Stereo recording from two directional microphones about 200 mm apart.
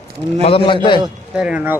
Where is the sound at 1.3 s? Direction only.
5° right (ahead or behind).